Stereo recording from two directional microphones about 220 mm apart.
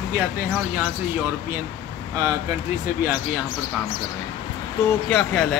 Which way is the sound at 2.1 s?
15° right (ahead or behind).